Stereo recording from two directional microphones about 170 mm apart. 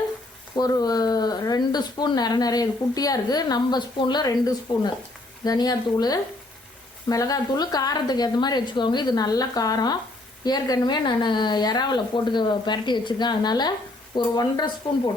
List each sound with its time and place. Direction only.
0.5 s speech: 20° left (ahead or behind)